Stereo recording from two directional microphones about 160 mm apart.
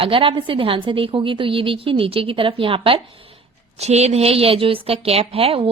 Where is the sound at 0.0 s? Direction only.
35° right (ahead or behind).